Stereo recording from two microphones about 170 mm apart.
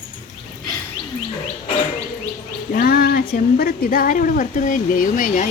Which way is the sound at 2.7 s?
60° left (ahead or behind).